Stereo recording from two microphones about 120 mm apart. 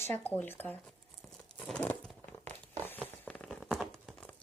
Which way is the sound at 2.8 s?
15° left (ahead or behind).